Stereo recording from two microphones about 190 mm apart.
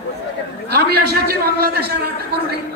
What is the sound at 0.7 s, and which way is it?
A man's voice, 55° right (ahead or behind).